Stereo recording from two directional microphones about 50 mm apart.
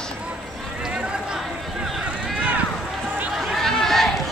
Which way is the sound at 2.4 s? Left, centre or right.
Right.